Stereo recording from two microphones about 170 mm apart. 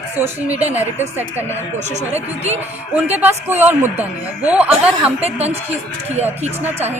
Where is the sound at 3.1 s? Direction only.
10° right (ahead or behind).